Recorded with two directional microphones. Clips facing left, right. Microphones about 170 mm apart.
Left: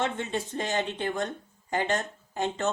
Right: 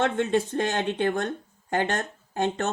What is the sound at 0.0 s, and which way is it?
A woman's voice, 60° right (ahead or behind).